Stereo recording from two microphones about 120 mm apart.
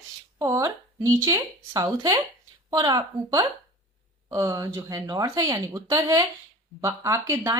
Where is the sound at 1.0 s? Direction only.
25° right (ahead or behind).